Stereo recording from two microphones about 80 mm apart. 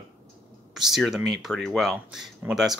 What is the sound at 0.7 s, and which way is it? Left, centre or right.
Speech, centre.